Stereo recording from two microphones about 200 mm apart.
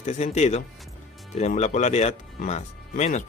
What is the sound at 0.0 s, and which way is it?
Speech, 35° left (ahead or behind).